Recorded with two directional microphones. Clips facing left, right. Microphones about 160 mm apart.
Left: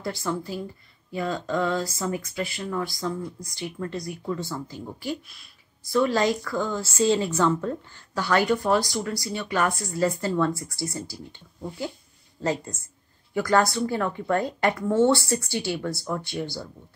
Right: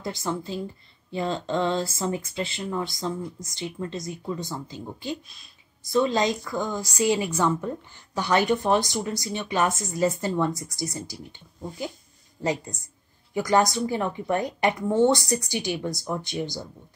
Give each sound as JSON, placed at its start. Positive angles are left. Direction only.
{"t": 0.0, "sound": "a woman's voice", "side_deg": -20}
{"t": 12.4, "sound": "speech", "side_deg": -15}